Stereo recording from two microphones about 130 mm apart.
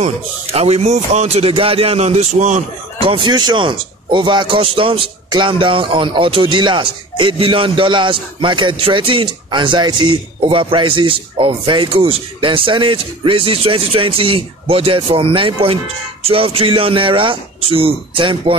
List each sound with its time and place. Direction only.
0.0 s speech: 55° right (ahead or behind)
3.0 s a man's voice: 40° right (ahead or behind)